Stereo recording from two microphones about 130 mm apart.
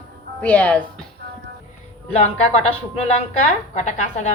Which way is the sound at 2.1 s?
55° left (ahead or behind).